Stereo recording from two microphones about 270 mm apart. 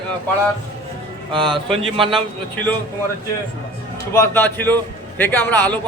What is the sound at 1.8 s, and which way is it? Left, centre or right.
Speech, centre.